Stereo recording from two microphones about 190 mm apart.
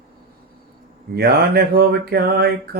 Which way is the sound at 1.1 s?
55° right (ahead or behind).